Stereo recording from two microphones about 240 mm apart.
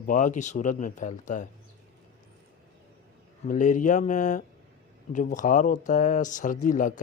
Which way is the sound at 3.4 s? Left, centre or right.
Left.